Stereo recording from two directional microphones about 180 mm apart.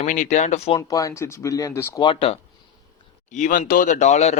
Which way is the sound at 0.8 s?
15° left (ahead or behind).